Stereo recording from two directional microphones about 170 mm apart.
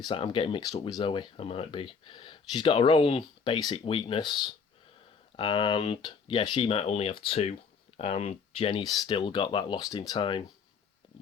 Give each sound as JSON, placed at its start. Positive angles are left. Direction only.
{"t": 0.0, "sound": "speech", "side_deg": 30}